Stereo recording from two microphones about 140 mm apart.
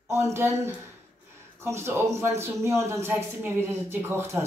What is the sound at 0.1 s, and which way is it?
A man's voice, 20° right (ahead or behind).